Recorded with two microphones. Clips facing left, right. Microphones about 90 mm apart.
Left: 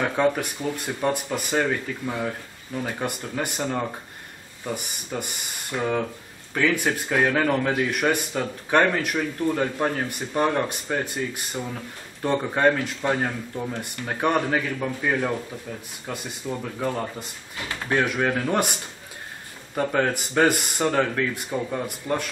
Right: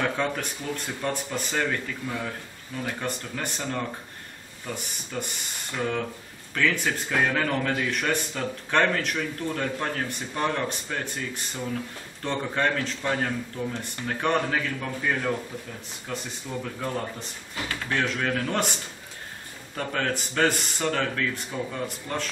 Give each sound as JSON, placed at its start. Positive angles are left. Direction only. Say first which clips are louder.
{"t": 0.2, "sound": "speech", "louder": "left 6 dB", "side_deg": 20}
{"t": 19.7, "sound": "speech", "louder": "left 5 dB", "side_deg": 15}